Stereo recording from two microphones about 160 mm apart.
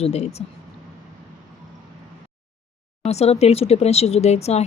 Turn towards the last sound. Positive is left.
turn(degrees=40)  # may be behind; listen again after turning